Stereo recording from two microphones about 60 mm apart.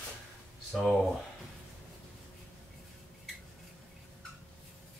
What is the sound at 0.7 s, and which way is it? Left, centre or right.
Speech, centre.